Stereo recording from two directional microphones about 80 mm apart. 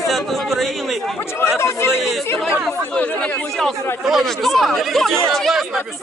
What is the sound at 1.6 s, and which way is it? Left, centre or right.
Speech, left.